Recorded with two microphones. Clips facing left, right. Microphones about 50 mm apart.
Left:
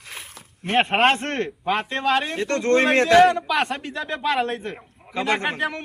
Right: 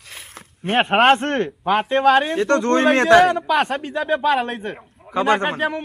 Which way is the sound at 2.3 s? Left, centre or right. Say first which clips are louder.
Right 4 dB; right.